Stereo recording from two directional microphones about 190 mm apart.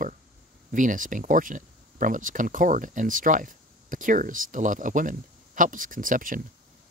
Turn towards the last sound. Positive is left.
turn(degrees=-45)  # may be behind; listen again after turning